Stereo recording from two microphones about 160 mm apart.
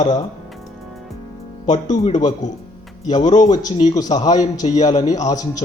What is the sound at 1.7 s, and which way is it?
Speech, 45° left (ahead or behind).